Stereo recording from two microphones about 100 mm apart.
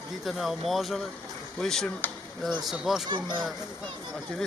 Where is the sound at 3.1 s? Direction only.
50° right (ahead or behind).